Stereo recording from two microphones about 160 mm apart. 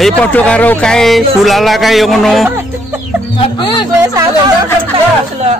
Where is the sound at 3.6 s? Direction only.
30° left (ahead or behind).